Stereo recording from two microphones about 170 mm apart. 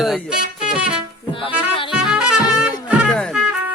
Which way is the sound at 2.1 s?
5° right (ahead or behind).